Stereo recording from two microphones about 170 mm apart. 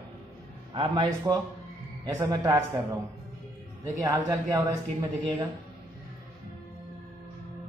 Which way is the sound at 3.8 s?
15° right (ahead or behind).